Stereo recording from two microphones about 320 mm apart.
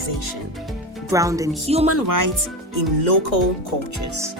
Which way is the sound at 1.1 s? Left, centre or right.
Centre.